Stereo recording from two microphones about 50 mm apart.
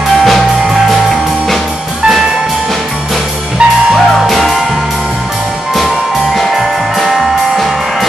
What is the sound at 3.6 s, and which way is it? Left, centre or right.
Music, centre.